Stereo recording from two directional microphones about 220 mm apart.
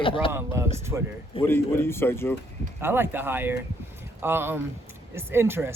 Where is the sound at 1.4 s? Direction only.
10° left (ahead or behind).